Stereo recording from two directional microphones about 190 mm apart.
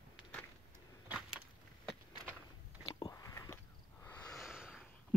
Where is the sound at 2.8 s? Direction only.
30° left (ahead or behind).